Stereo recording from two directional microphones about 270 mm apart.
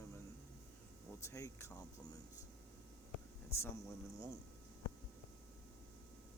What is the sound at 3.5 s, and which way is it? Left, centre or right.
Speech, centre.